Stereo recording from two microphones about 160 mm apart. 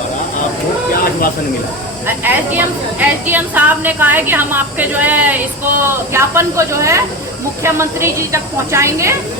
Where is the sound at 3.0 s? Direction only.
10° right (ahead or behind).